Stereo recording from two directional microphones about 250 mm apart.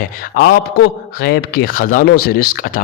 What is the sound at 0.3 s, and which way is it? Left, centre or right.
Speech, left.